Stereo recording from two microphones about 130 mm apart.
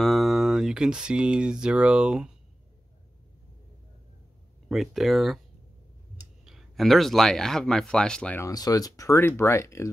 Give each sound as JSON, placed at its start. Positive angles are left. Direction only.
{"t": 0.0, "sound": "speech", "side_deg": 0}
{"t": 4.6, "sound": "speech", "side_deg": 0}
{"t": 6.4, "sound": "speech", "side_deg": 0}
{"t": 8.4, "sound": "speech", "side_deg": 30}